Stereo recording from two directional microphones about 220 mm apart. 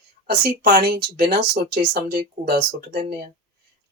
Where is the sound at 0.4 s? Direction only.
45° right (ahead or behind).